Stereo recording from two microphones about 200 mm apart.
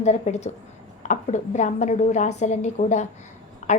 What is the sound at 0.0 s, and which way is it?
A woman's voice, 35° left (ahead or behind).